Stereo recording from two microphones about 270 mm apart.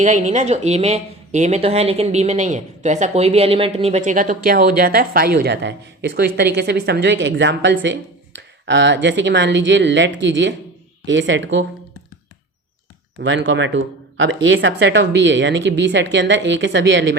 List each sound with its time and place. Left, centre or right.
0.0 s a woman's voice: right
13.1 s a woman's voice: right